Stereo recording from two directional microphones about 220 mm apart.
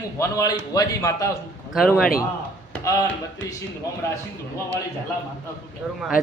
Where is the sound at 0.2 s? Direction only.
15° left (ahead or behind).